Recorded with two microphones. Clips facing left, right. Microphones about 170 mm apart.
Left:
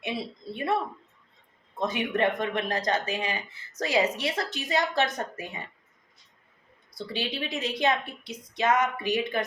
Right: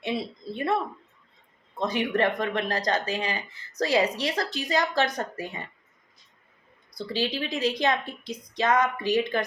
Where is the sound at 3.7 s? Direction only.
35° right (ahead or behind).